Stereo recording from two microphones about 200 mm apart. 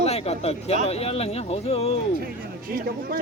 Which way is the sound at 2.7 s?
50° right (ahead or behind).